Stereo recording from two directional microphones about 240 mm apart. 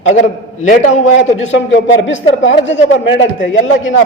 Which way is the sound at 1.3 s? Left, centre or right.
Left.